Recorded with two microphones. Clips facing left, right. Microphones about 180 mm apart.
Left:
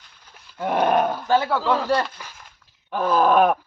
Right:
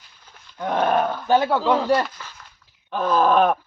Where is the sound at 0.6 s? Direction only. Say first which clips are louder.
Left 1 dB; 10° left (ahead or behind).